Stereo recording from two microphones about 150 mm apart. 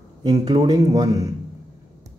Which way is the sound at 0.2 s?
25° right (ahead or behind).